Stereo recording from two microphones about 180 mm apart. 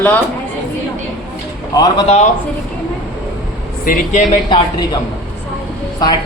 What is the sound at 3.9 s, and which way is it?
Speech, 50° left (ahead or behind).